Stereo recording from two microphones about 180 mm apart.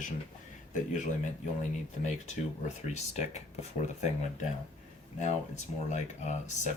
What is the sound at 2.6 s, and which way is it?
Speech, 40° left (ahead or behind).